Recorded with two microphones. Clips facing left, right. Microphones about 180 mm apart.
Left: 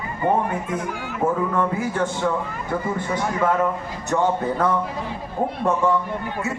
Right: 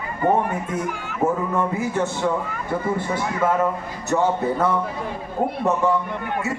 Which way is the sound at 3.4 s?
5° right (ahead or behind).